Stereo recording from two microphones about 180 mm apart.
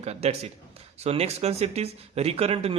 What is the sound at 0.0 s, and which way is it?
Speech, 35° right (ahead or behind).